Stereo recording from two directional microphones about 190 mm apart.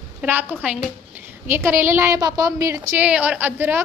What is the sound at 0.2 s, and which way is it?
A woman's voice, 10° right (ahead or behind).